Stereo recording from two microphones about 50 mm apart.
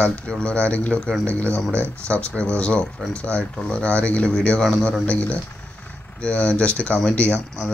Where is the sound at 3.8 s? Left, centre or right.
Left.